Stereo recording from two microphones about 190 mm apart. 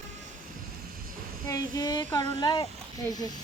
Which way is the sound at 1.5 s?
20° left (ahead or behind).